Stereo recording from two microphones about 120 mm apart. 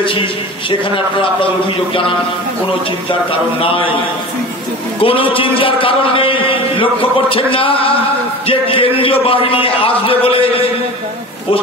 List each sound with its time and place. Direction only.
0.0 s a man's voice: 45° left (ahead or behind)
3.1 s a man's voice: 50° left (ahead or behind)
5.0 s a man's voice: 50° left (ahead or behind)